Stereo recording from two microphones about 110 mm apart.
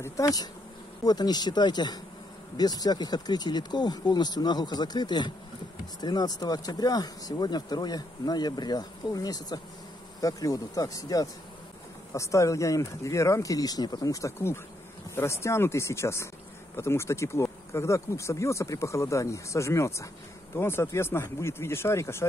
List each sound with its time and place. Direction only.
0.0 s speech: 30° left (ahead or behind)